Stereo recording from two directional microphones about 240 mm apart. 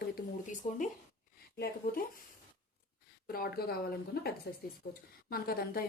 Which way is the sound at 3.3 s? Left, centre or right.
Left.